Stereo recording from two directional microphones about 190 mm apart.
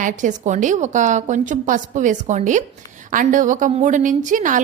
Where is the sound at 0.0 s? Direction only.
40° right (ahead or behind).